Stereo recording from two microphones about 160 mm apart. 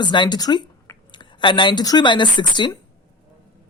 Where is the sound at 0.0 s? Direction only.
30° left (ahead or behind).